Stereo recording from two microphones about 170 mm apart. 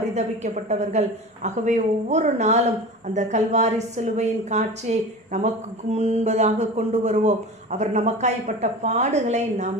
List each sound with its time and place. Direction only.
0.1 s a woman's voice: 40° right (ahead or behind)